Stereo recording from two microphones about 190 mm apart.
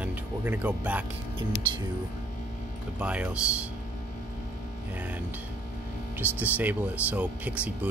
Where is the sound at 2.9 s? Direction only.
5° right (ahead or behind).